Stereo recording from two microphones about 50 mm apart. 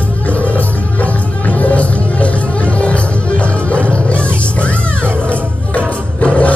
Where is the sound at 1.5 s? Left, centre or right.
Left.